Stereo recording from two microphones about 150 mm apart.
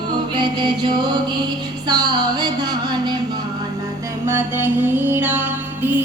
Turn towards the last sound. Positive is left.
turn(degrees=-10)  # may be behind; listen again after turning